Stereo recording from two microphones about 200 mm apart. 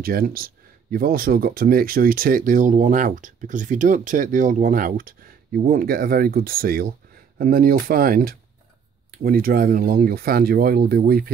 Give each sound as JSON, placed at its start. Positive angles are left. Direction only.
{"t": 0.0, "sound": "speech", "side_deg": -45}